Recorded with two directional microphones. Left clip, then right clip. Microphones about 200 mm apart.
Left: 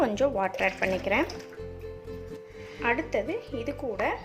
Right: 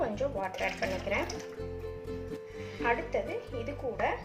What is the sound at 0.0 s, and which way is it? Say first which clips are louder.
Speech: left 7 dB; 55° left (ahead or behind).